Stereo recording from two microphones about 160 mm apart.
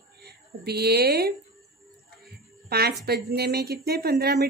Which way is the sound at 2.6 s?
80° right.